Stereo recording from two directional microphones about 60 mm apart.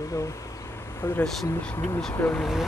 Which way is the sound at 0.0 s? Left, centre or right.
Left.